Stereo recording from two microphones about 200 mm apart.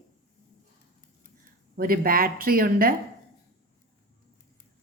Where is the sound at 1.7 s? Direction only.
45° right (ahead or behind).